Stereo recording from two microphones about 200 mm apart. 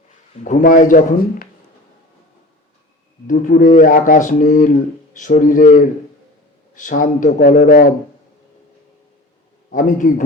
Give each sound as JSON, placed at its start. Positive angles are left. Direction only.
{"t": 0.4, "sound": "a man's voice", "side_deg": 40}
{"t": 3.2, "sound": "speech", "side_deg": 40}
{"t": 7.0, "sound": "a man's voice", "side_deg": 40}
{"t": 9.7, "sound": "a man's voice", "side_deg": 40}